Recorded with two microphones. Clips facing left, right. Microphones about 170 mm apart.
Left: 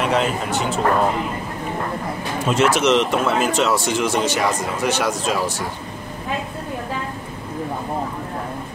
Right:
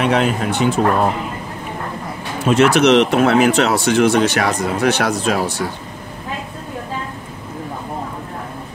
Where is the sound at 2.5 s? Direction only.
65° right (ahead or behind).